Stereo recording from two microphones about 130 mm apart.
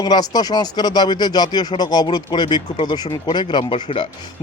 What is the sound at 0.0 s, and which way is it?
Speech, 30° left (ahead or behind).